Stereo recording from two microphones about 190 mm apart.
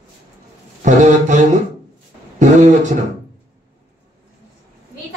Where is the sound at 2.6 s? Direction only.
40° right (ahead or behind).